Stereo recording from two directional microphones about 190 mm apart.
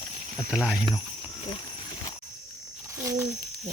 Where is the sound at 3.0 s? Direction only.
15° right (ahead or behind).